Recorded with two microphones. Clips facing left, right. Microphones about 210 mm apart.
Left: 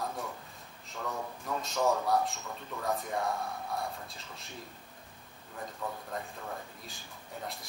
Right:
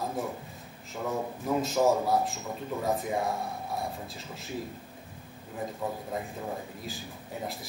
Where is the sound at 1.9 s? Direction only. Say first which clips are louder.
Right 3 dB; 25° right (ahead or behind).